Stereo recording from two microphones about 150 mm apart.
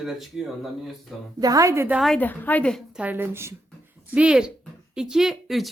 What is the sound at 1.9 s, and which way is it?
Speech, centre (ahead or behind).